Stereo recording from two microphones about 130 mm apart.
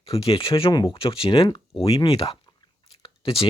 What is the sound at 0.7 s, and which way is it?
Speech, 35° left (ahead or behind).